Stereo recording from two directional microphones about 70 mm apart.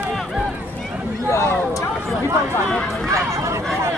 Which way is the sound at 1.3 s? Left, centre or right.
Left.